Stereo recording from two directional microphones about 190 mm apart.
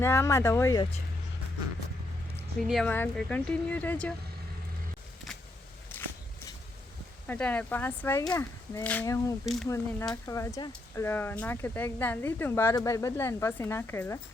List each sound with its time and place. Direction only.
0.0 s speech: 15° left (ahead or behind)
2.6 s speech: centre (ahead or behind)
5.9 s walk: 10° left (ahead or behind)
7.3 s speech: 5° left (ahead or behind)